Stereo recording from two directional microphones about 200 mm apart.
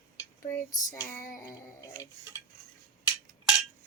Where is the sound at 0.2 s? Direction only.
15° left (ahead or behind).